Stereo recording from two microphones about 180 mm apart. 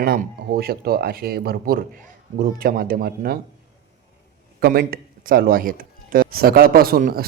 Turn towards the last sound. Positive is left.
turn(degrees=-50)  # may be behind; listen again after turning